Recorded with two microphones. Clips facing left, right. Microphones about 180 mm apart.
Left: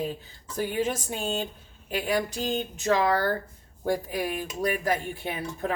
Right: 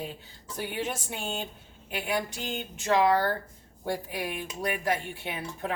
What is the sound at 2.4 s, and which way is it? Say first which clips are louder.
Speech: left 6 dB; 40° left (ahead or behind).